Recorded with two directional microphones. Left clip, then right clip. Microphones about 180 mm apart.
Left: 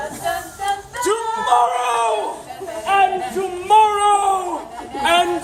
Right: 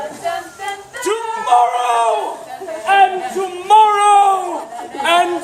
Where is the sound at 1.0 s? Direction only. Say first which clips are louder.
Right 2 dB; 10° left (ahead or behind).